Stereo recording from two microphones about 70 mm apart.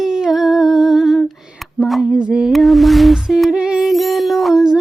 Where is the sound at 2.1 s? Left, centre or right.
Centre.